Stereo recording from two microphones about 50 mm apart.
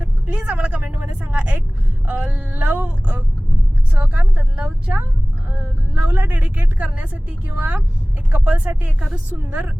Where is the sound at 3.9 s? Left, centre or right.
Right.